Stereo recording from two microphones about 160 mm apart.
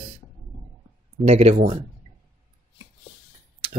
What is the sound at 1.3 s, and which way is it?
Speech, 40° right (ahead or behind).